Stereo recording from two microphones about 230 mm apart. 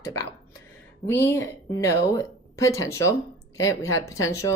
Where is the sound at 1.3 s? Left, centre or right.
Centre.